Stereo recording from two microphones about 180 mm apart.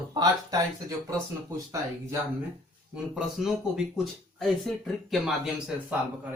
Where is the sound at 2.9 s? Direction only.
Centre (ahead or behind).